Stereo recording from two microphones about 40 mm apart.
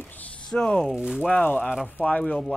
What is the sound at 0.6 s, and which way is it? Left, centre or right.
Speech, centre.